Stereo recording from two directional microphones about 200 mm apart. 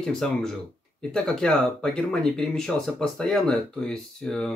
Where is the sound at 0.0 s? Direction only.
5° left (ahead or behind).